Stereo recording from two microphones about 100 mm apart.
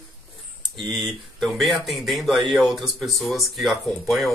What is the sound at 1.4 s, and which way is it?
Speech, centre (ahead or behind).